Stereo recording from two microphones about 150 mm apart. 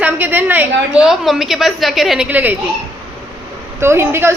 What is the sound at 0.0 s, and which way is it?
A woman's voice, 10° right (ahead or behind).